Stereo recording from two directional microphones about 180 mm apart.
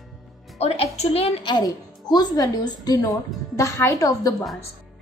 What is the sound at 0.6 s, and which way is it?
A woman's voice, 35° left (ahead or behind).